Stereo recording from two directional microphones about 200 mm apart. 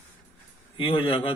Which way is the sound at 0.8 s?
25° left (ahead or behind).